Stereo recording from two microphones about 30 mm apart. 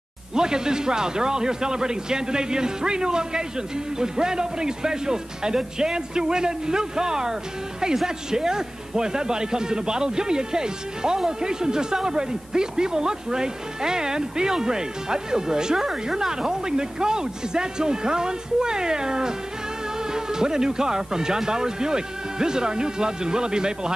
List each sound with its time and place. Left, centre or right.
0.3 s a man's voice: right